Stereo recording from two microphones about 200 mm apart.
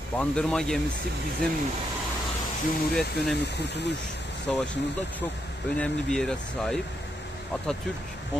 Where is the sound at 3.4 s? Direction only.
55° left (ahead or behind).